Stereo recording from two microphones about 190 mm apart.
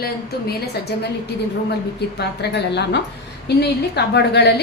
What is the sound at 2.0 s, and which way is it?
A woman's voice, 60° left (ahead or behind).